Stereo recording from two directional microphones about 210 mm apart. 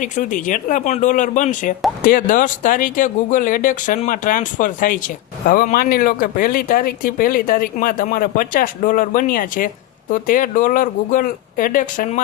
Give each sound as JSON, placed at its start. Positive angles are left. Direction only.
{"t": 0.0, "sound": "speech", "side_deg": 40}